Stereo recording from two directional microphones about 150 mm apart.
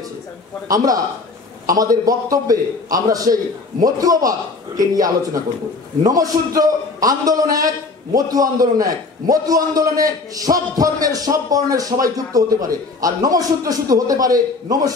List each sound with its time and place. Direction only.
1.7 s a man's voice: 25° right (ahead or behind)